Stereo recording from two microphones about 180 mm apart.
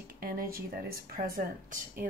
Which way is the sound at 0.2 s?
55° right (ahead or behind).